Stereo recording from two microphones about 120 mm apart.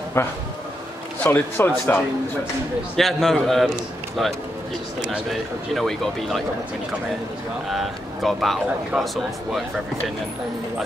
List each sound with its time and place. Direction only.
0.2 s a man's voice: 20° left (ahead or behind)
3.0 s speech: 5° left (ahead or behind)
7.7 s speech: centre (ahead or behind)